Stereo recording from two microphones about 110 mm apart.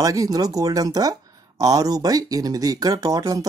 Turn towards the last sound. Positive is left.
turn(degrees=-35)  # may be behind; listen again after turning